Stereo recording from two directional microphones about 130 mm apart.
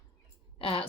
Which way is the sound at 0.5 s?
45° left (ahead or behind).